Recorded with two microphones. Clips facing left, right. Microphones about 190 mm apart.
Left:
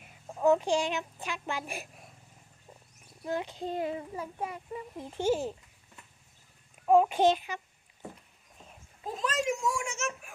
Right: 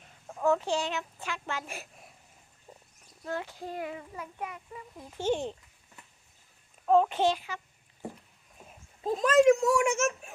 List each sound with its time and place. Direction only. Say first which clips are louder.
0.0 s speech: left 2 dB; 15° left (ahead or behind)
3.2 s speech: left 3 dB; 20° left (ahead or behind)
5.2 s speech: left 1 dB; 5° left (ahead or behind)
6.8 s speech: left 1 dB; 10° left (ahead or behind)
9.1 s a child's voice: right 11 dB; 50° right (ahead or behind)